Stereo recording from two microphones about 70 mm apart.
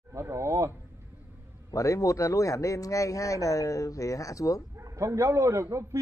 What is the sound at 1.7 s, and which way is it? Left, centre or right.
Speech, left.